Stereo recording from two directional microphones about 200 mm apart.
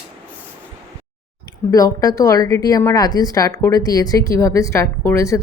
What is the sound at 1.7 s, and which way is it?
Speech, 20° left (ahead or behind).